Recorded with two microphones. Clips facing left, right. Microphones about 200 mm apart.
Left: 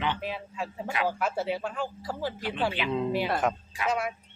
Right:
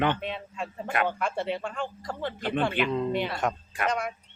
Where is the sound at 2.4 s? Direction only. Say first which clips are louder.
Right 5 dB; 55° right (ahead or behind).